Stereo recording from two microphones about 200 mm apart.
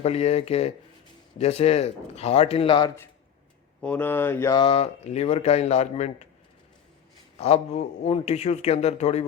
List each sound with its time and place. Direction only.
0.0 s a man's voice: 30° left (ahead or behind)
3.8 s a sound: 10° left (ahead or behind)
4.6 s a man's voice: 30° left (ahead or behind)
7.3 s a man's voice: 30° left (ahead or behind)